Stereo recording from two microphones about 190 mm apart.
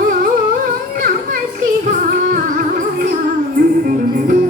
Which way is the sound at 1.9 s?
50° right (ahead or behind).